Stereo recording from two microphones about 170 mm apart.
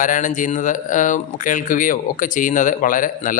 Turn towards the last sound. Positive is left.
turn(degrees=50)  # may be behind; listen again after turning